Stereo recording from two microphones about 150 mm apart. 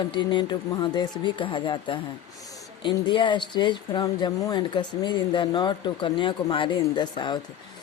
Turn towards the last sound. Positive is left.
turn(degrees=30)  # may be behind; listen again after turning